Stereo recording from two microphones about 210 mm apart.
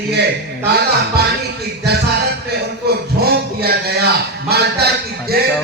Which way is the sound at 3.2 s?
50° right (ahead or behind).